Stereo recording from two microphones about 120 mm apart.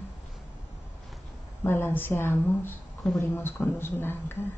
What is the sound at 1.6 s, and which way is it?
Speech, 20° left (ahead or behind).